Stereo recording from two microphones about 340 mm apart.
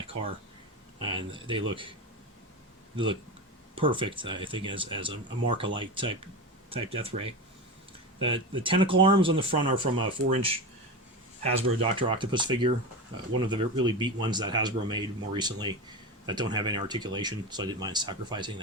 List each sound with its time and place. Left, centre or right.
1.0 s speech: centre